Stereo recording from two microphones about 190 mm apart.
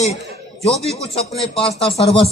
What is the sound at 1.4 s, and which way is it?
Speech, 30° left (ahead or behind).